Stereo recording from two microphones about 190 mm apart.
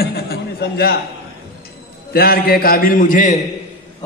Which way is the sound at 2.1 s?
55° left (ahead or behind).